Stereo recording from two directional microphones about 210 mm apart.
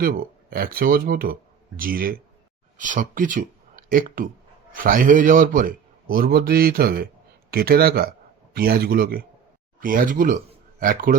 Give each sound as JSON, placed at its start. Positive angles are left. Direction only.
{"t": 0.0, "sound": "a man's voice", "side_deg": -45}